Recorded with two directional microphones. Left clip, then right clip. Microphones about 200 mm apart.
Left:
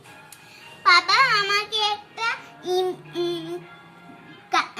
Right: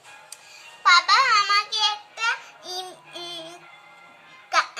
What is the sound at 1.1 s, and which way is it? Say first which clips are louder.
Child singing: right 1 dB; 15° right (ahead or behind).